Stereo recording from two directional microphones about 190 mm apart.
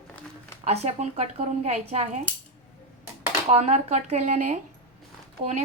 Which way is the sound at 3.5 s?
35° right (ahead or behind).